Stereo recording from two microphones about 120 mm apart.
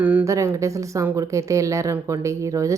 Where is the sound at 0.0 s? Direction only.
15° right (ahead or behind).